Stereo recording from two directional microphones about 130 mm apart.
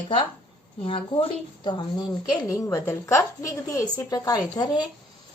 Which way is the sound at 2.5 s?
20° left (ahead or behind).